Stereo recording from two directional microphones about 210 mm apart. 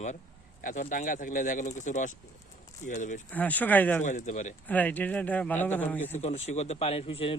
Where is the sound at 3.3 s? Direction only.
5° left (ahead or behind).